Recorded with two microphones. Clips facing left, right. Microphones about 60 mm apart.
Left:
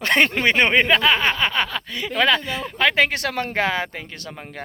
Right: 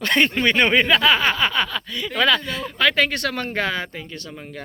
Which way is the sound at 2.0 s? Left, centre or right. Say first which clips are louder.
Even; left.